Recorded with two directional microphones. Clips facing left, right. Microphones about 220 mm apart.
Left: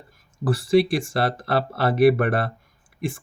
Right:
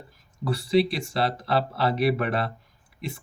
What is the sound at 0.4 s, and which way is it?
Speech, 50° left (ahead or behind).